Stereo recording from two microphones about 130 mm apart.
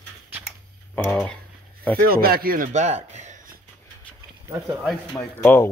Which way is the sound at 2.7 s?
60° right (ahead or behind).